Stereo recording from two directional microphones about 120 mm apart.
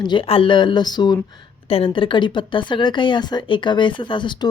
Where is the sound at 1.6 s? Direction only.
50° left (ahead or behind).